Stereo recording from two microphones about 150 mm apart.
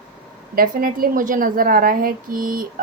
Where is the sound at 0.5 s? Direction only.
75° right (ahead or behind).